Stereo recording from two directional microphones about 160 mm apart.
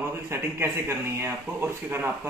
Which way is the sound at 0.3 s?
15° right (ahead or behind).